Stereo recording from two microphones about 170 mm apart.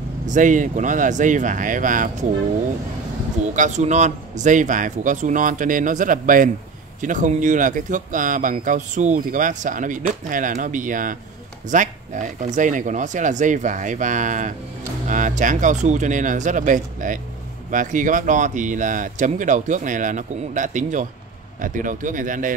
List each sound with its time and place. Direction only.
0.3 s speech: 50° right (ahead or behind)
3.5 s speech: 45° right (ahead or behind)